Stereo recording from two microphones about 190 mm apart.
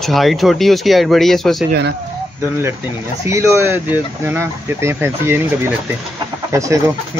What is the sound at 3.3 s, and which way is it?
Speech, 15° right (ahead or behind).